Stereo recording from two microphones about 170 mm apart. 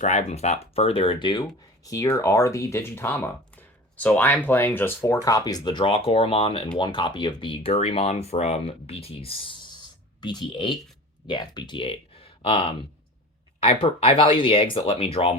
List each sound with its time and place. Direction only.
0.0 s speech: 45° left (ahead or behind)